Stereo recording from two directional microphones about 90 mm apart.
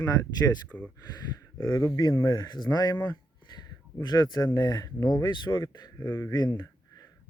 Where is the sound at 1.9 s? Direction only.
45° left (ahead or behind).